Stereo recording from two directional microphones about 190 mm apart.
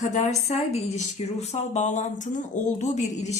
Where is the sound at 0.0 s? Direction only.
40° left (ahead or behind).